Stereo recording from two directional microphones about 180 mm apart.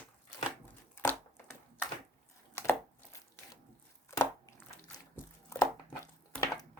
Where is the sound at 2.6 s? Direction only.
15° left (ahead or behind).